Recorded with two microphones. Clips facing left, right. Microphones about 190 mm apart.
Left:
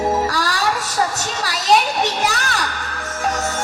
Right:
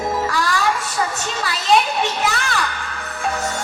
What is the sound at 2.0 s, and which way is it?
Music, 40° left (ahead or behind).